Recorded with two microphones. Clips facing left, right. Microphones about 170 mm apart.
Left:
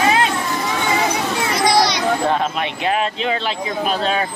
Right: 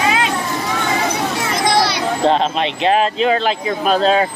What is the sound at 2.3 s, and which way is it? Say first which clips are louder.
Speech: right 4 dB; 25° right (ahead or behind).